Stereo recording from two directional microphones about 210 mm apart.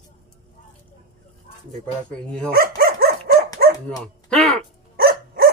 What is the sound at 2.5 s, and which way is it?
Dog, 45° right (ahead or behind).